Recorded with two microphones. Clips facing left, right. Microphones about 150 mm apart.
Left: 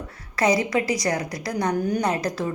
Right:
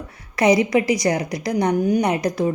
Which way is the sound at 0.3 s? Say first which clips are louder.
Right 5 dB; 20° right (ahead or behind).